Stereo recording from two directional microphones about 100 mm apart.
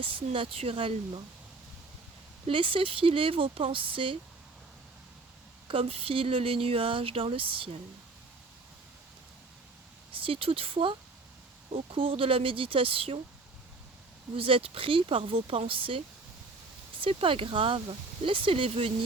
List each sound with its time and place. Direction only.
0.0 s speech: 60° right (ahead or behind)
2.5 s speech: 60° right (ahead or behind)
5.6 s speech: 70° right (ahead or behind)
10.1 s speech: 65° right (ahead or behind)
14.3 s speech: 65° right (ahead or behind)
17.0 s speech: 65° right (ahead or behind)